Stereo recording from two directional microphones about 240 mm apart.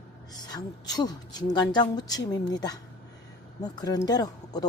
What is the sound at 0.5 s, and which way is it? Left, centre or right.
Speech, centre.